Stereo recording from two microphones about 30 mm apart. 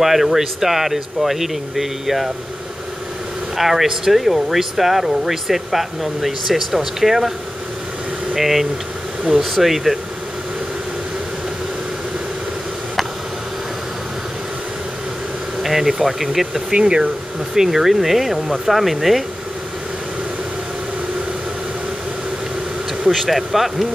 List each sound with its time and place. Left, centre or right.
0.0 s speech: centre
3.5 s speech: centre
8.4 s speech: centre
15.6 s air conditioning: centre
16.0 s speech: centre
16.7 s speech: right
17.6 s speech: centre
23.0 s speech: centre